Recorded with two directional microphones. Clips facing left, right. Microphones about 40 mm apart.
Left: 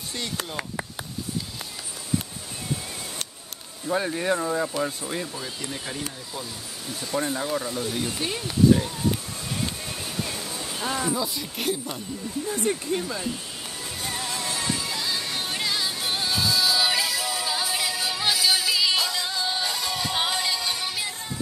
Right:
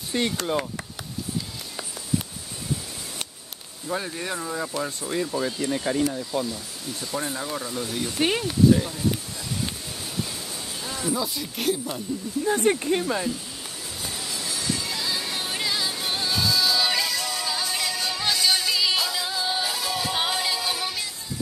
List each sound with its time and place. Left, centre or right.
0.1 s speech: right
3.8 s speech: centre
5.4 s speech: centre
7.0 s speech: centre
11.1 s speech: centre
12.4 s speech: right
14.3 s music: left
14.8 s music: centre